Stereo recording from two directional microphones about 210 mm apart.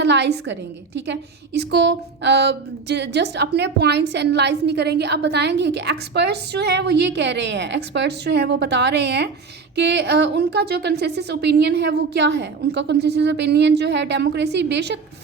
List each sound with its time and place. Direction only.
0.0 s speech: 55° right (ahead or behind)